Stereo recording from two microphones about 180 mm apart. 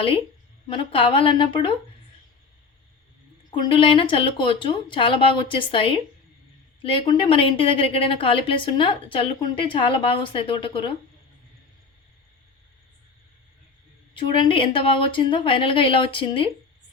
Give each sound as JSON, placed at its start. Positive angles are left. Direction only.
{"t": 0.7, "sound": "a woman's voice", "side_deg": 30}
{"t": 3.5, "sound": "a woman's voice", "side_deg": 25}
{"t": 14.1, "sound": "a woman's voice", "side_deg": 30}